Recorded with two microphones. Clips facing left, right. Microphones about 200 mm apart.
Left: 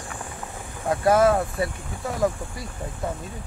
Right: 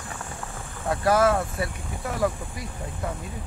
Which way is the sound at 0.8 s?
20° left (ahead or behind).